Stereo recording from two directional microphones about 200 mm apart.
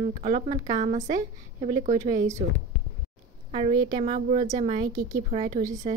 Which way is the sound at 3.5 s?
35° right (ahead or behind).